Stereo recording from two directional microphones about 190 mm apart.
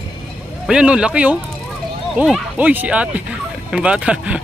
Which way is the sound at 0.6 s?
5° right (ahead or behind).